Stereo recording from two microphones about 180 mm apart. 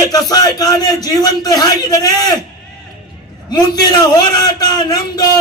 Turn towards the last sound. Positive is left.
turn(degrees=20)  # may be behind; listen again after turning